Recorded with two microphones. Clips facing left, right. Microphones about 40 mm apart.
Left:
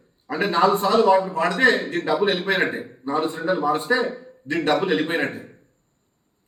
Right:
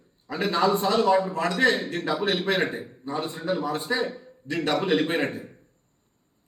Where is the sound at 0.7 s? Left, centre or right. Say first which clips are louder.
Left 4 dB; centre.